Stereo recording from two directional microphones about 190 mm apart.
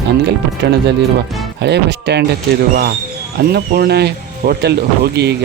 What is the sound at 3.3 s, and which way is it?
Speech, 55° right (ahead or behind).